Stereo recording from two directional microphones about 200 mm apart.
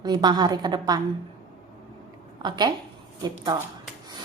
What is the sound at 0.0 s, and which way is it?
Speech, 20° right (ahead or behind).